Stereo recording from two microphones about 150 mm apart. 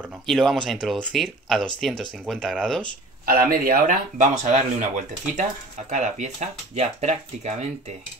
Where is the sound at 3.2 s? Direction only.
75° right (ahead or behind); by 7.7 s 50° right (ahead or behind).